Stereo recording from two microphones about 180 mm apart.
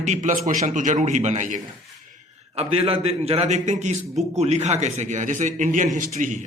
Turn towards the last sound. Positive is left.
turn(degrees=-45)  # may be behind; listen again after turning